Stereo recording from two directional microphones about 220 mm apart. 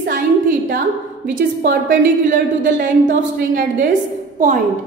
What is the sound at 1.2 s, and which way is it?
A woman's voice, 40° right (ahead or behind).